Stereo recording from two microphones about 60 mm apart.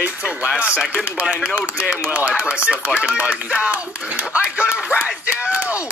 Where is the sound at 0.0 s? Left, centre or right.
Right.